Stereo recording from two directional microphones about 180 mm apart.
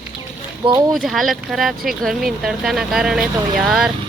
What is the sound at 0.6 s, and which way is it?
Speech, 20° right (ahead or behind).